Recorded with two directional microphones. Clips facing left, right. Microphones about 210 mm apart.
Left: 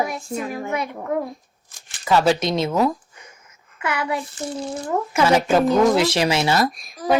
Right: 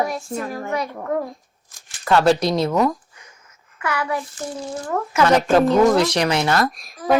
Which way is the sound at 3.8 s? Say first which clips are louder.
Even; 25° left (ahead or behind).